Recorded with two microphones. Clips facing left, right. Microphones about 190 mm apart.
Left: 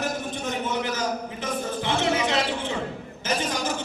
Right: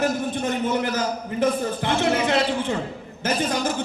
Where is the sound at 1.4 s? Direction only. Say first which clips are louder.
Right 8 dB; 55° right (ahead or behind).